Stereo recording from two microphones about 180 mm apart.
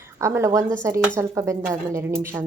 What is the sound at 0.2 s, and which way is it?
Speech, 15° right (ahead or behind).